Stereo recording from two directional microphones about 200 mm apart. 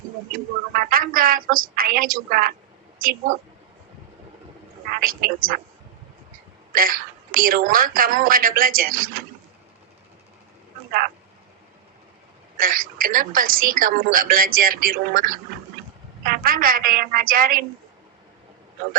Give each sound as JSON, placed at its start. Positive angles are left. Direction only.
{"t": 0.3, "sound": "a woman's voice", "side_deg": -45}
{"t": 4.9, "sound": "a woman's voice", "side_deg": -45}
{"t": 6.7, "sound": "a woman's voice", "side_deg": -45}
{"t": 12.5, "sound": "a woman's voice", "side_deg": -45}